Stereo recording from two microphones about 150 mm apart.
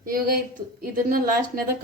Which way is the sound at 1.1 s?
80° right.